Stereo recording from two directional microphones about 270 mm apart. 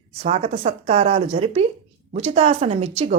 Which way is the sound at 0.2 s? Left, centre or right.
Right.